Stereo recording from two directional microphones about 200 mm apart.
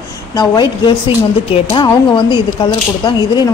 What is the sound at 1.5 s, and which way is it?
Speech, 25° left (ahead or behind).